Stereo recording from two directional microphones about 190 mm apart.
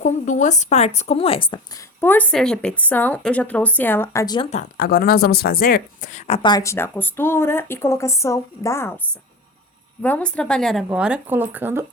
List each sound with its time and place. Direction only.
0.0 s a woman's voice: 40° left (ahead or behind); by 4.4 s 15° left (ahead or behind)
4.4 s speech: 35° left (ahead or behind)
4.8 s a woman's voice: 55° left (ahead or behind); by 11.9 s 10° right (ahead or behind)